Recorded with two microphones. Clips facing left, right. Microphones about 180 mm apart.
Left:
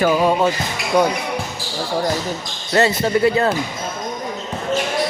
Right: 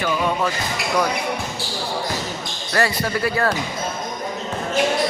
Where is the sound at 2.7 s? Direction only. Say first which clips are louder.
Left 5 dB; 25° left (ahead or behind).